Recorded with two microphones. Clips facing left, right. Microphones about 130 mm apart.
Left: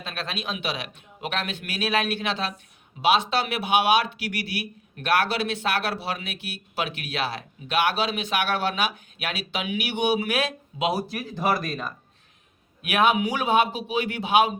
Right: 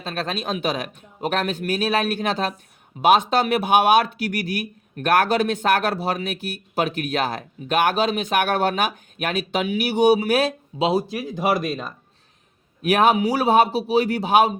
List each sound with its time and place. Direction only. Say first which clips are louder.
0.0 s speech: right 5 dB; 40° right (ahead or behind); by 11.9 s 20° right (ahead or behind)
12.8 s speech: right 4 dB; 40° right (ahead or behind)